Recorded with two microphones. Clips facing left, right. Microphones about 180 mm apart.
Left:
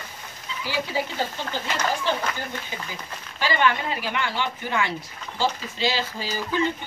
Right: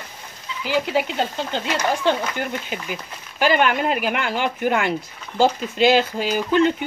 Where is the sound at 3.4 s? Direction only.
55° right (ahead or behind).